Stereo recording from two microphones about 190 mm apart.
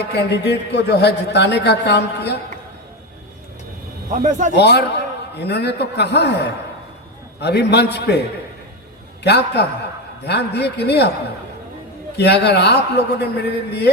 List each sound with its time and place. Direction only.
0.0 s a man's voice: 60° left (ahead or behind)
4.1 s speech: 40° right (ahead or behind)
4.5 s a man's voice: 60° left (ahead or behind)
9.2 s a man's voice: 60° left (ahead or behind)
12.1 s a man's voice: 60° left (ahead or behind)